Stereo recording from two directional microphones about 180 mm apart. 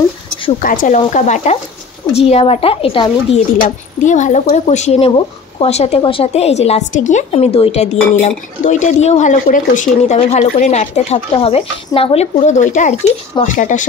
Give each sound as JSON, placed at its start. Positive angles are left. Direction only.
{"t": 0.8, "sound": "speech", "side_deg": 40}
{"t": 3.6, "sound": "speech", "side_deg": 45}